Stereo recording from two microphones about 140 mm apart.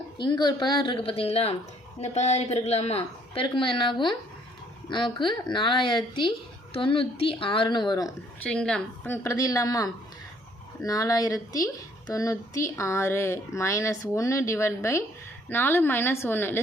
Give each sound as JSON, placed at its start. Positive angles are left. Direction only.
{"t": 0.2, "sound": "a woman's voice", "side_deg": 35}
{"t": 8.4, "sound": "speech", "side_deg": 5}
{"t": 9.0, "sound": "a woman's voice", "side_deg": 20}